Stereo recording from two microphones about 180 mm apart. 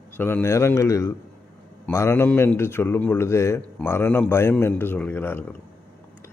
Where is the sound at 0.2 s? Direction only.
15° left (ahead or behind).